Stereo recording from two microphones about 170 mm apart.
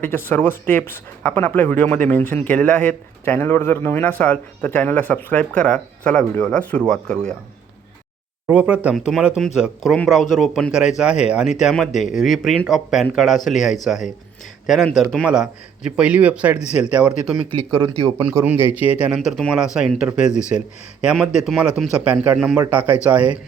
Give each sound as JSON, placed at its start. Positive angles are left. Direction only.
{"t": 0.0, "sound": "speech", "side_deg": 10}
{"t": 8.4, "sound": "speech", "side_deg": -5}
{"t": 17.7, "sound": "speech", "side_deg": -30}
{"t": 18.2, "sound": "speech", "side_deg": -10}